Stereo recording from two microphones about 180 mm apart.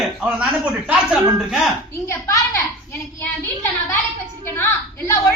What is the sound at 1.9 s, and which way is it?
Speech, 15° left (ahead or behind).